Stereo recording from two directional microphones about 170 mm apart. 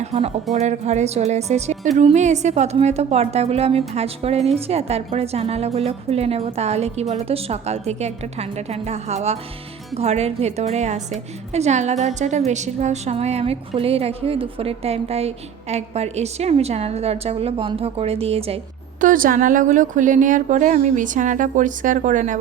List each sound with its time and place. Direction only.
0.0 s a woman's voice: 40° right (ahead or behind)
18.9 s a woman's voice: 55° right (ahead or behind)